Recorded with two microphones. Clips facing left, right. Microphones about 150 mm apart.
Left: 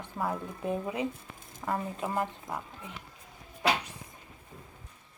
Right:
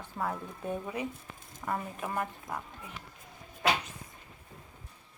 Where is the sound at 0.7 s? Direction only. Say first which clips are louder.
Left 3 dB; 20° left (ahead or behind).